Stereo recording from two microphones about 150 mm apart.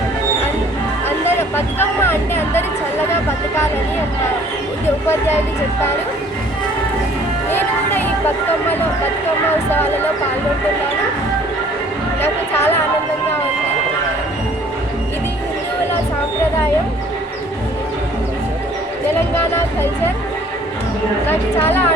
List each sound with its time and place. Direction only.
1.0 s music: 15° left (ahead or behind)
3.1 s speech: 15° left (ahead or behind)
7.5 s music: 10° left (ahead or behind)
12.2 s a woman's voice: 15° left (ahead or behind)
19.4 s a woman's voice: 15° left (ahead or behind)
21.2 s a woman's voice: 15° left (ahead or behind)